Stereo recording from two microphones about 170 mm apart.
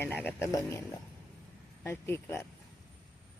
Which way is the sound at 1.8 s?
15° left (ahead or behind).